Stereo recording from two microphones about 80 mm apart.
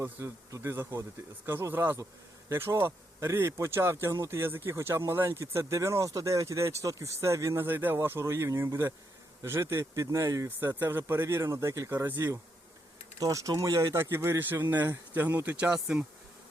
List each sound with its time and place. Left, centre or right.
0.0 s a man's voice: right
7.6 s a man's voice: right
10.6 s speech: right
13.1 s speech: right
15.7 s speech: centre